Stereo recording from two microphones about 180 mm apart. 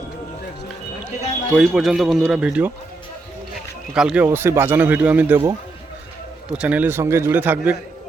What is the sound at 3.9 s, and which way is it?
Speech, 5° right (ahead or behind).